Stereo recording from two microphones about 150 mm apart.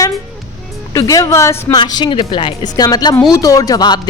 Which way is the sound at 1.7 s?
30° left (ahead or behind).